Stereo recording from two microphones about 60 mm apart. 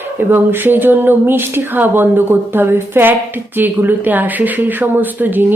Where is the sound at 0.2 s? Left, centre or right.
Right.